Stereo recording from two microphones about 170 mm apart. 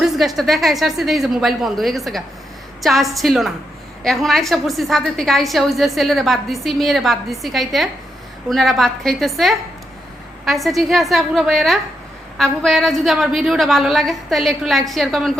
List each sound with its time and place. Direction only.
0.0 s a woman's voice: centre (ahead or behind)